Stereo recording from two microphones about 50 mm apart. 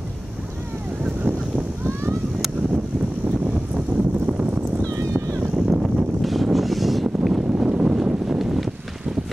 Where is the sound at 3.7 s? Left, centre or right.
Centre.